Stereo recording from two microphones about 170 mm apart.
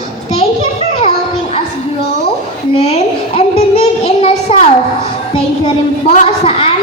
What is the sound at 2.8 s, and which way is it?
A child's voice, 35° left (ahead or behind).